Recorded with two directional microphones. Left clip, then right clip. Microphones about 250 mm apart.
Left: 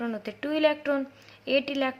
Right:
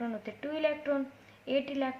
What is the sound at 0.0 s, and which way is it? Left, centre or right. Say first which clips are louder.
A woman's voice: left 5 dB; left.